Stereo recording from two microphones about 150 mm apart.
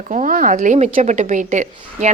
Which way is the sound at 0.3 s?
65° right (ahead or behind).